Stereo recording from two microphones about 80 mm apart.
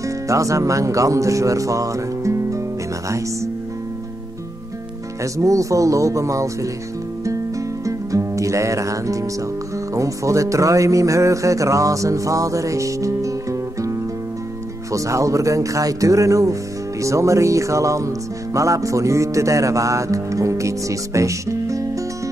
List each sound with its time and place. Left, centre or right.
0.0 s speech: right
5.2 s speech: right
7.8 s music: right
9.9 s speech: right
17.0 s music: right